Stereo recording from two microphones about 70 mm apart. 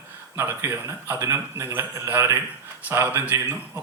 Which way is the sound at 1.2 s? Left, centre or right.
Right.